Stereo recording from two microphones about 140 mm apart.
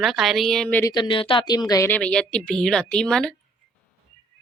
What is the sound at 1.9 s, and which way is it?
A woman's voice, 5° left (ahead or behind).